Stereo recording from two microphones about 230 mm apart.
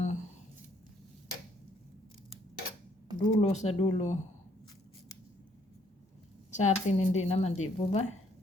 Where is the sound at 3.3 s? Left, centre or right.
Left.